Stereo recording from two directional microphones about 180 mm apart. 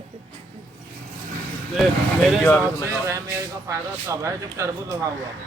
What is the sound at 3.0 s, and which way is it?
Speech, 15° right (ahead or behind).